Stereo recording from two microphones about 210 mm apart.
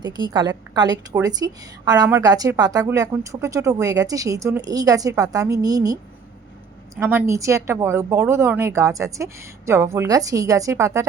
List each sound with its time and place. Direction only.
0.0 s a woman's voice: 20° right (ahead or behind)